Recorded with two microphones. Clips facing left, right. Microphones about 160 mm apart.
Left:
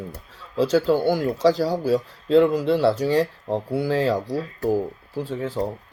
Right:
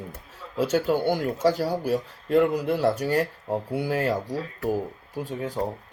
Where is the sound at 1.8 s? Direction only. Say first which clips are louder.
Left 4 dB; 90° left.